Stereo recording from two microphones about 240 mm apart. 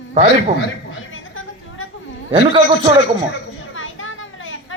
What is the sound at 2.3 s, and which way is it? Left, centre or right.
Speech, centre.